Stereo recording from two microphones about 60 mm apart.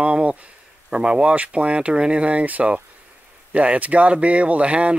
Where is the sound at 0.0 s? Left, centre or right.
Centre.